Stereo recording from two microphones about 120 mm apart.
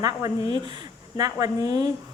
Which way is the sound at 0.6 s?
35° right (ahead or behind).